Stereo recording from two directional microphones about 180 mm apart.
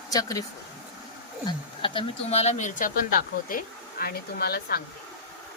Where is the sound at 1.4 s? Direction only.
30° left (ahead or behind); by 4.8 s 60° left (ahead or behind).